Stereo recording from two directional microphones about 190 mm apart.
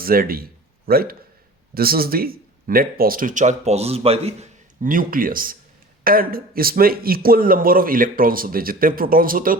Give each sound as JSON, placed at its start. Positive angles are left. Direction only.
{"t": 0.0, "sound": "a man's voice", "side_deg": -50}